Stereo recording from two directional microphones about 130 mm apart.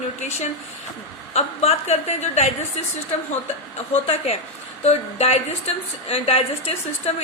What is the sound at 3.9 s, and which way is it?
A woman's voice, 55° left (ahead or behind).